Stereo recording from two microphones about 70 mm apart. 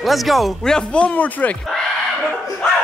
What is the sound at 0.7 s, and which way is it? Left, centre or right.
Speech, centre.